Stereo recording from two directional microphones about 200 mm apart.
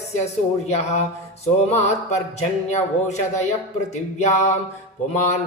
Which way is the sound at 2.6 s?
35° left (ahead or behind).